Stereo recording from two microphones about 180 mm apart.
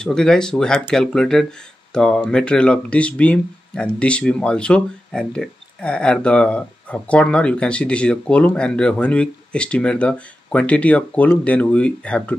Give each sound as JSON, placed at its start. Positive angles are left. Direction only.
{"t": 0.0, "sound": "speech", "side_deg": 5}